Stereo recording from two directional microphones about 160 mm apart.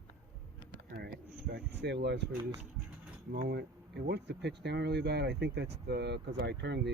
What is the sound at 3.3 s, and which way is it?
Speech, 90° right.